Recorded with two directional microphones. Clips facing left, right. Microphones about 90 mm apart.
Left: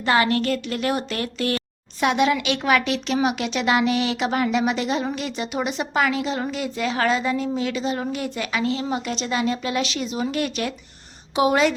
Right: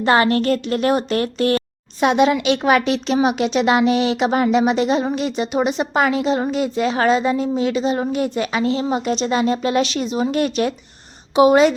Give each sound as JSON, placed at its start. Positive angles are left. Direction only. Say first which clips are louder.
{"t": 0.0, "sound": "a woman's voice", "louder": "right 4 dB", "side_deg": -35}